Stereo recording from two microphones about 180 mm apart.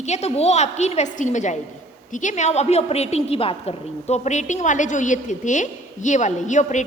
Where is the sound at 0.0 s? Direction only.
40° left (ahead or behind).